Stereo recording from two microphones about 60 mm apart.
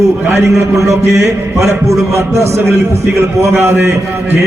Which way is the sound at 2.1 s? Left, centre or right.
Right.